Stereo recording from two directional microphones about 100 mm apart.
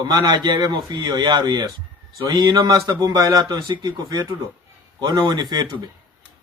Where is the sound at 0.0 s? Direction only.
40° right (ahead or behind).